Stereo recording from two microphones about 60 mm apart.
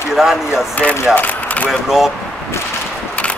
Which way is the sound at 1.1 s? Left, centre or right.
Left.